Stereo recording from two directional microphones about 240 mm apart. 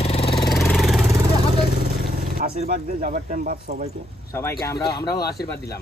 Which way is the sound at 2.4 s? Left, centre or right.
Right.